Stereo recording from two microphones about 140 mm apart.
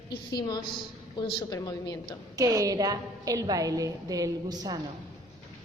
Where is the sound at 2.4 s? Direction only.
25° right (ahead or behind).